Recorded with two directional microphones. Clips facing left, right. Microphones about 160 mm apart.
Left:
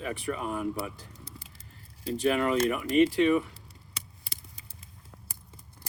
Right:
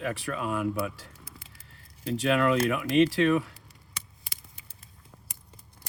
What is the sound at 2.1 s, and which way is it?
Speech, 85° right.